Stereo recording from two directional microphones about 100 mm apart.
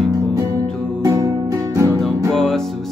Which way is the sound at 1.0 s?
35° right (ahead or behind).